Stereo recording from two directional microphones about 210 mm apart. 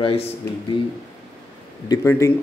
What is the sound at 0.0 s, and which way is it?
Speech, 25° left (ahead or behind).